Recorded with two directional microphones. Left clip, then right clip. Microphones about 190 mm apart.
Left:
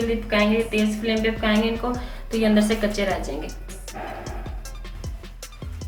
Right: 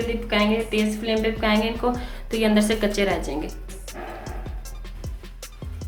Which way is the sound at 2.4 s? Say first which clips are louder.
Even; 45° right (ahead or behind).